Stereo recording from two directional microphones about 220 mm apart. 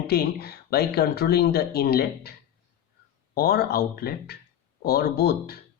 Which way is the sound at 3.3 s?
45° left (ahead or behind).